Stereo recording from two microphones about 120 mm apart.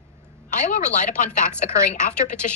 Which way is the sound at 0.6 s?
90° left.